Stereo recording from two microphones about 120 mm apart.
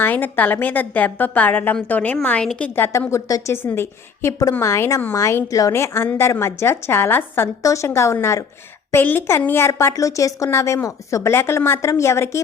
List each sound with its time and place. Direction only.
0.0 s a woman's voice: 15° left (ahead or behind)